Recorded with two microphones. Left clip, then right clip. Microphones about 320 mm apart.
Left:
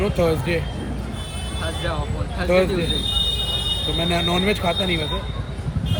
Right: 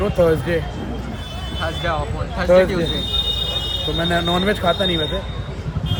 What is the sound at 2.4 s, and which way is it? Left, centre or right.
Speech, right.